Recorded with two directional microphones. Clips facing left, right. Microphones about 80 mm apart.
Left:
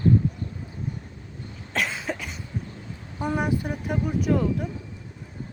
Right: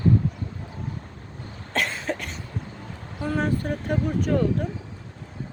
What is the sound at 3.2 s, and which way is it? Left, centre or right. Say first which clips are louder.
Speech: even; centre.